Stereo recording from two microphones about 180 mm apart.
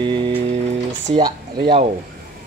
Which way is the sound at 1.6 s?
30° right (ahead or behind).